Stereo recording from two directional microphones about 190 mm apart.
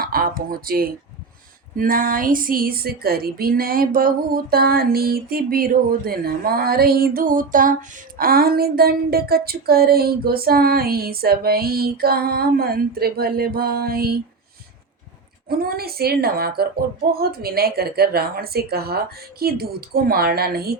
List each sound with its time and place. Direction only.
0.0 s a sound: 50° right (ahead or behind)
1.7 s a woman's voice: 45° right (ahead or behind)
15.4 s a woman's voice: 50° right (ahead or behind)